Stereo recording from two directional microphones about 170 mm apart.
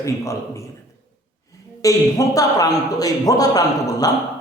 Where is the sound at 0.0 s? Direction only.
15° left (ahead or behind).